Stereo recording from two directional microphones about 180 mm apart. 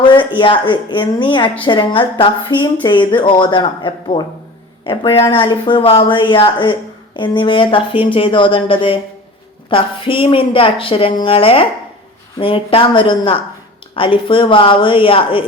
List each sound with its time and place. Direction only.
0.0 s a woman's voice: 25° left (ahead or behind)